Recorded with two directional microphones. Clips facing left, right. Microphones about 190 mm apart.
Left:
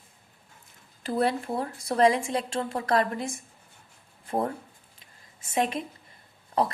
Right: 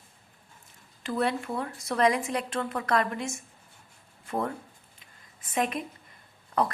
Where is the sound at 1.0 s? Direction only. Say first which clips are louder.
Left 2 dB; 35° left (ahead or behind).